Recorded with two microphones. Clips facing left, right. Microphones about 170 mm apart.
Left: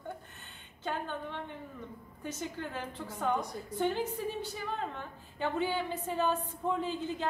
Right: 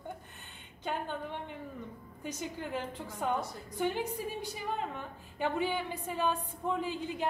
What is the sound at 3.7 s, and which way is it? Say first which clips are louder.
A woman's voice: left 1 dB; 15° right (ahead or behind).